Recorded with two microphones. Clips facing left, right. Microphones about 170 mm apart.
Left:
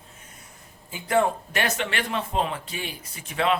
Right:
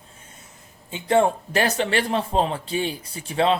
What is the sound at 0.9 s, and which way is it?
Speech, 30° right (ahead or behind).